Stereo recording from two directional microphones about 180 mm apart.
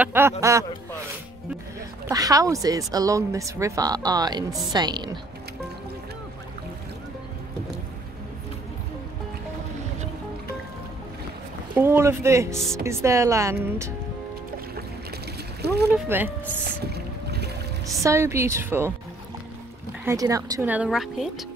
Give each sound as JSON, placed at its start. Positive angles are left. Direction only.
{"t": 0.0, "sound": "speech", "side_deg": -10}
{"t": 2.0, "sound": "speech", "side_deg": -20}
{"t": 11.7, "sound": "speech", "side_deg": -10}
{"t": 15.9, "sound": "speech", "side_deg": -10}
{"t": 16.8, "sound": "boat", "side_deg": -65}
{"t": 18.0, "sound": "speech", "side_deg": -15}
{"t": 20.1, "sound": "speech", "side_deg": -20}
{"t": 20.7, "sound": "speech", "side_deg": -5}